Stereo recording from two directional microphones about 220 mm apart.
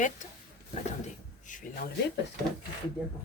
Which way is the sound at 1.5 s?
35° left (ahead or behind).